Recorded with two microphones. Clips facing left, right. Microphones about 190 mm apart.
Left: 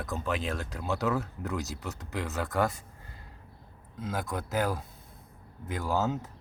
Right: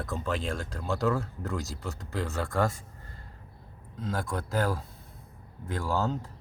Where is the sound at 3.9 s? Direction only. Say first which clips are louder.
Right 1 dB; centre (ahead or behind).